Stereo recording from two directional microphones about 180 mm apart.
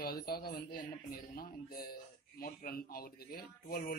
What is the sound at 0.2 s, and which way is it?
A man's voice, 55° left (ahead or behind).